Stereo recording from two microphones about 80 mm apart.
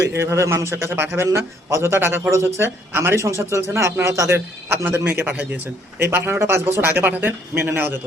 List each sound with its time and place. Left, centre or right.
0.1 s a man's voice: right
4.7 s speech: right